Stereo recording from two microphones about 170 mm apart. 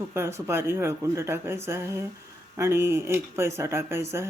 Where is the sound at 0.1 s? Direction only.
15° right (ahead or behind).